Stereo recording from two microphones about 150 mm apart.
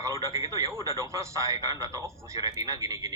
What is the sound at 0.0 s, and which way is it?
Speech, 20° right (ahead or behind).